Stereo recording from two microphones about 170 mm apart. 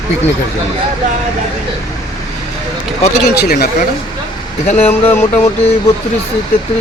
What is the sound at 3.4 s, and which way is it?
Speech, 65° left (ahead or behind).